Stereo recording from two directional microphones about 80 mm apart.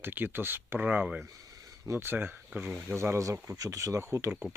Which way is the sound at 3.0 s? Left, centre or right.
Right.